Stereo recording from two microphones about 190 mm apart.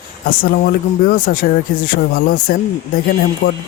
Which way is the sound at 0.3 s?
50° left (ahead or behind).